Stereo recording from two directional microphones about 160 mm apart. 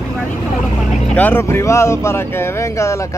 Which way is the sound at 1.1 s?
10° left (ahead or behind).